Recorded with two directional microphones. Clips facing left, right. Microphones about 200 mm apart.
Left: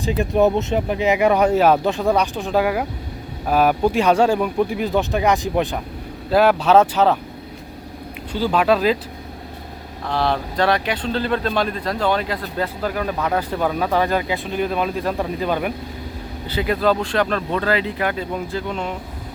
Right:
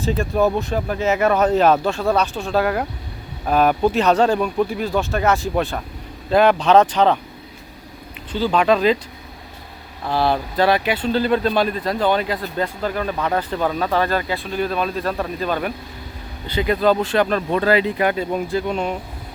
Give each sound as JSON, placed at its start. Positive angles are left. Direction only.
{"t": 0.0, "sound": "speech", "side_deg": 20}
{"t": 6.3, "sound": "speech", "side_deg": 5}
{"t": 8.3, "sound": "speech", "side_deg": 10}
{"t": 10.1, "sound": "speech", "side_deg": -5}
{"t": 16.5, "sound": "speech", "side_deg": 5}